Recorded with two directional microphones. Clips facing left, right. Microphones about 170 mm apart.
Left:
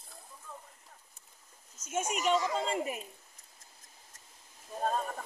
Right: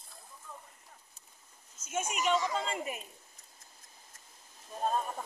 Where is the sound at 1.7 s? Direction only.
40° left (ahead or behind).